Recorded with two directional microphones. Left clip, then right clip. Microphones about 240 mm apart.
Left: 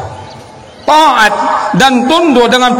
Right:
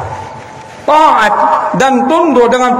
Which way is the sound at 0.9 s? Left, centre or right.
Left.